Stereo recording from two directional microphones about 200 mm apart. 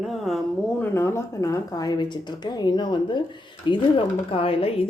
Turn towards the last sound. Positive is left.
turn(degrees=30)  # may be behind; listen again after turning